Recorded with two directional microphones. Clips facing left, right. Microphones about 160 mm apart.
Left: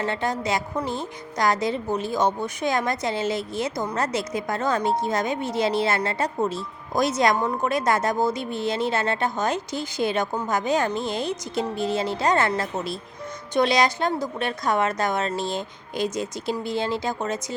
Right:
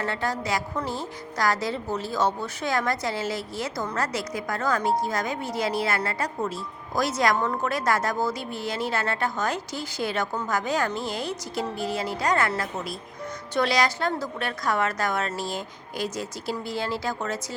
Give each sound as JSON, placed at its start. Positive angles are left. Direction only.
{"t": 0.0, "sound": "a woman's voice", "side_deg": 20}